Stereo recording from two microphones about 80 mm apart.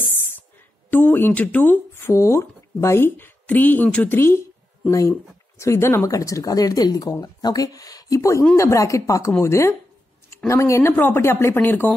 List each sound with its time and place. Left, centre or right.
0.8 s speech: left
4.2 s speech: left
5.6 s speech: left